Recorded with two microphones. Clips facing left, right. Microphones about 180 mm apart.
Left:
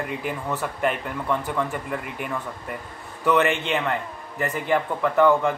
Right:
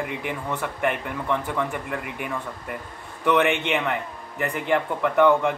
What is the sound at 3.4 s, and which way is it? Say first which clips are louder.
Speech: right 1 dB; 60° right (ahead or behind).